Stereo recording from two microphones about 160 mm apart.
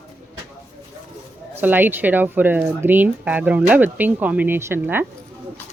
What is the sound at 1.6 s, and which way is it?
Speech, 10° right (ahead or behind).